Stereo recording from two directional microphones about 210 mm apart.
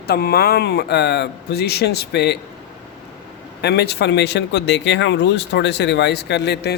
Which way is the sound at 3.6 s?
50° left (ahead or behind).